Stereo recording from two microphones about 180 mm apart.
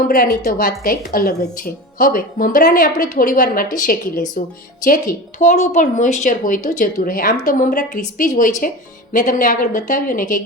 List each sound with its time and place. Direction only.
0.4 s a woman's voice: 55° left (ahead or behind)